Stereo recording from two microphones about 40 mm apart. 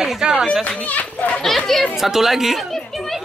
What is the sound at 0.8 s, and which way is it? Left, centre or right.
Speech, left.